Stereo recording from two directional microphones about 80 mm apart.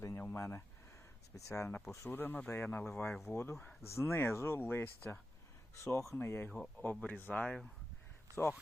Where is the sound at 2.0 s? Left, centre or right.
Left.